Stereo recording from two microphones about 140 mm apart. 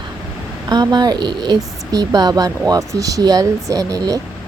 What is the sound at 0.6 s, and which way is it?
Speech, 30° right (ahead or behind).